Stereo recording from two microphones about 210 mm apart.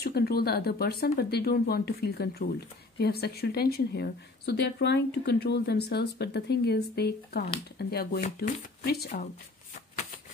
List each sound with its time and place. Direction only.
0.0 s speech: 45° left (ahead or behind)